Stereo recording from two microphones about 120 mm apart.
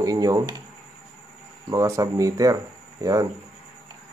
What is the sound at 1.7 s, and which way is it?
Speech, 30° right (ahead or behind).